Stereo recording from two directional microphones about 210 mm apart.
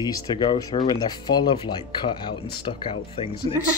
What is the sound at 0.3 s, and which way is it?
Speech, 20° left (ahead or behind).